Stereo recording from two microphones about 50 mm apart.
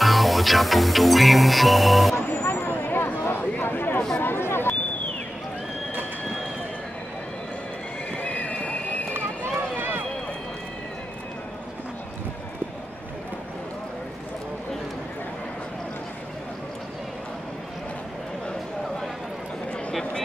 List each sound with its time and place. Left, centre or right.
0.0 s music: centre
2.2 s a sound: left
8.2 s run: left
9.8 s run: right